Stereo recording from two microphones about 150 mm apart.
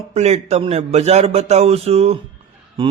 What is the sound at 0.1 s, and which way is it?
A man's voice, 50° right (ahead or behind).